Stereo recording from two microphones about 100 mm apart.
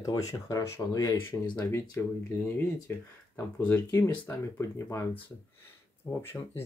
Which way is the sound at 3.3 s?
20° left (ahead or behind).